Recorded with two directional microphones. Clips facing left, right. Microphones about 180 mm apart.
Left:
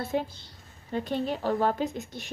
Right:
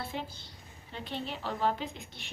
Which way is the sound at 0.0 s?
45° left (ahead or behind).